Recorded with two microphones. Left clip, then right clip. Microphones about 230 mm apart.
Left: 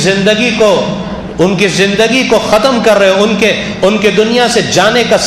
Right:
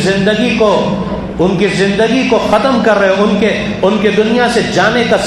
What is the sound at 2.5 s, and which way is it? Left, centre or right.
A man's voice, left.